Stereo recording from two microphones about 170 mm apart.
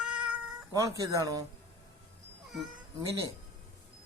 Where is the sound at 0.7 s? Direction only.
20° right (ahead or behind).